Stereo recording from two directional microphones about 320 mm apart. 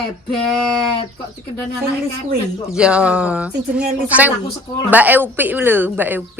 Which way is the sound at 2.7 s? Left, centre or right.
Centre.